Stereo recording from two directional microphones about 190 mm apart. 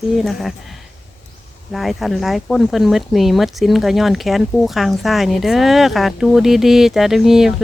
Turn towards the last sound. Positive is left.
turn(degrees=0)  # may be behind; listen again after turning